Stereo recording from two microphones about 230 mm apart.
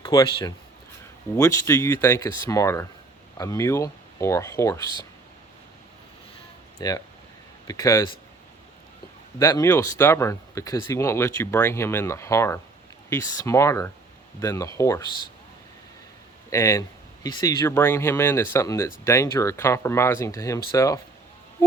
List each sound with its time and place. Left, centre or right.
0.0 s speech: centre
6.7 s speech: centre
9.4 s speech: centre
16.5 s speech: centre